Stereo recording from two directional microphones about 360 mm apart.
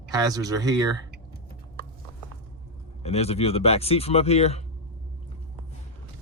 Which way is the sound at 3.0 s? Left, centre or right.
Centre.